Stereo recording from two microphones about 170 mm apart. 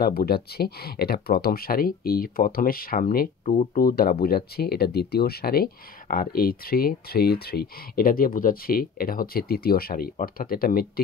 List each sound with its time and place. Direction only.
0.0 s speech: 60° left (ahead or behind)